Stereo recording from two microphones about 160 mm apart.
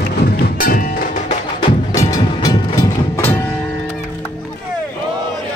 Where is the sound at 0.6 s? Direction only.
60° left (ahead or behind).